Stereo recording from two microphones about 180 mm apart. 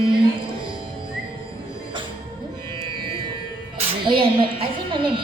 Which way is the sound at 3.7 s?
30° right (ahead or behind).